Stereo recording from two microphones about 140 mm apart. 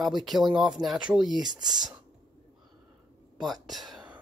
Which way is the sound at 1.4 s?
30° right (ahead or behind).